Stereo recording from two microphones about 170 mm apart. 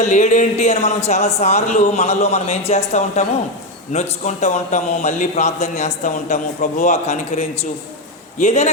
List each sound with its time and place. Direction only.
0.0 s a man's voice: 45° left (ahead or behind)